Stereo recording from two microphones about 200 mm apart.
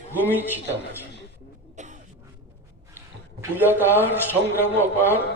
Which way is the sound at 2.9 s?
10° right (ahead or behind).